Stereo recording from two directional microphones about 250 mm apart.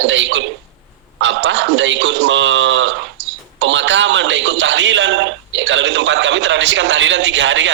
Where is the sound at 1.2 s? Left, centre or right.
Right.